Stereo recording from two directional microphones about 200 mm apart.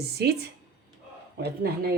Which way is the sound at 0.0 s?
55° right (ahead or behind).